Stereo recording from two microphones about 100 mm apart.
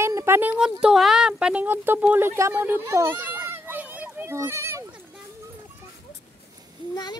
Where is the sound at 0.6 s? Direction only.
5° right (ahead or behind); by 4.8 s 25° right (ahead or behind).